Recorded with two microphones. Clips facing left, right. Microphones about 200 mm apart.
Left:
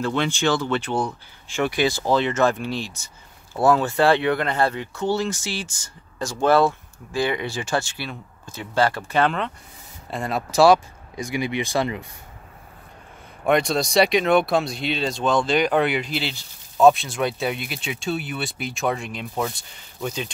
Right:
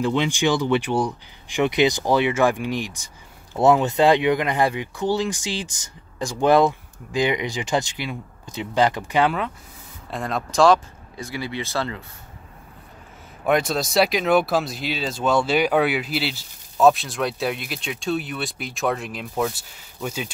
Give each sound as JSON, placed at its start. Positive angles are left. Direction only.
{"t": 0.0, "sound": "speech", "side_deg": -15}
{"t": 10.1, "sound": "speech", "side_deg": 5}
{"t": 13.5, "sound": "speech", "side_deg": 0}